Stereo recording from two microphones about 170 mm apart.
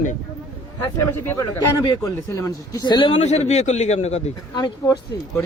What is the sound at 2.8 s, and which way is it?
A man's voice, 25° left (ahead or behind).